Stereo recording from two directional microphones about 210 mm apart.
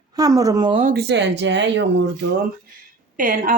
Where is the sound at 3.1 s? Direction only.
40° right (ahead or behind).